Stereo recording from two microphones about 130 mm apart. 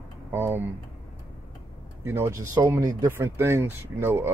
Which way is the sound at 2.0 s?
20° right (ahead or behind).